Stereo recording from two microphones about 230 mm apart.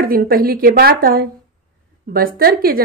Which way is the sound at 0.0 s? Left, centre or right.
Right.